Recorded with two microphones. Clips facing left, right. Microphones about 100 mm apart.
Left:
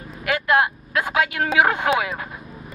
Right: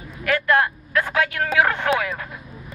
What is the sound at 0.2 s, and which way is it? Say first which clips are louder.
Speech: even; 15° left (ahead or behind).